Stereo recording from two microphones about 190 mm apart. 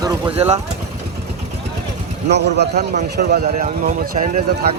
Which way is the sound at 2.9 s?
45° right (ahead or behind).